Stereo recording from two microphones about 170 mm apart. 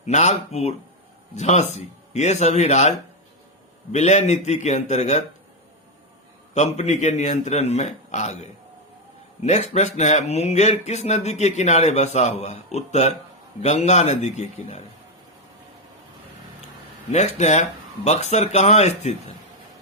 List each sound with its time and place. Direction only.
0.0 s speech: 40° left (ahead or behind)
3.9 s speech: 40° left (ahead or behind)
6.5 s speech: 40° left (ahead or behind)
17.1 s speech: 45° left (ahead or behind)